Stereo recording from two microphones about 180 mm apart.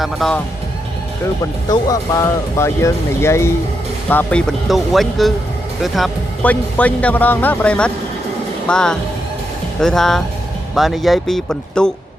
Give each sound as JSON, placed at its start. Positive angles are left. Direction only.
{"t": 0.0, "sound": "speech", "side_deg": 5}
{"t": 1.6, "sound": "speech", "side_deg": 20}